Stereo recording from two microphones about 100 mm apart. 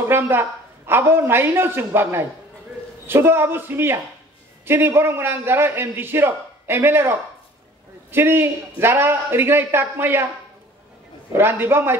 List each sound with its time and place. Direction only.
0.1 s a man's voice: 20° right (ahead or behind)
11.3 s a man's voice: 25° right (ahead or behind)